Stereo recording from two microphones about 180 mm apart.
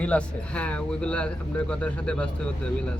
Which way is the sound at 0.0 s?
5° left (ahead or behind).